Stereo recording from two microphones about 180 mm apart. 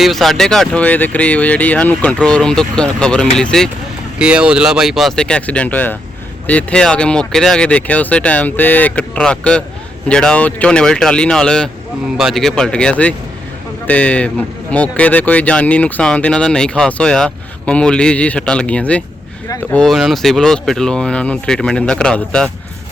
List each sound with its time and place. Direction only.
0.0 s speech: centre (ahead or behind)